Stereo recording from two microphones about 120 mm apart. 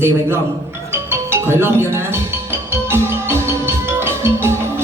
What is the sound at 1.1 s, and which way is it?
Music, 20° right (ahead or behind).